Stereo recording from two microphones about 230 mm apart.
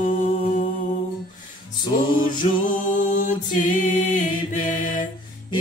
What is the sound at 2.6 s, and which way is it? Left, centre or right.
A capella, left.